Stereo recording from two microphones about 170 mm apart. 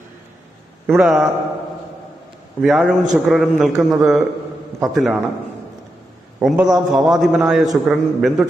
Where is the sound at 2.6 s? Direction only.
Centre (ahead or behind).